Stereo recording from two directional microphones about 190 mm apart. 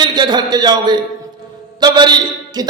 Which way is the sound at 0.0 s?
20° right (ahead or behind).